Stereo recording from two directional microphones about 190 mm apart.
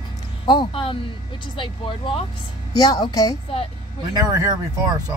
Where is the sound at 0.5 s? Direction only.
25° left (ahead or behind).